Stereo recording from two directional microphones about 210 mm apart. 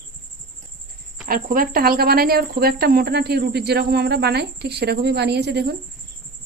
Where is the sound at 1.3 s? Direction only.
40° right (ahead or behind).